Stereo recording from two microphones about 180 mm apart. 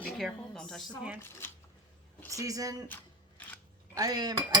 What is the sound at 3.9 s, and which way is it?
Speech, 20° right (ahead or behind).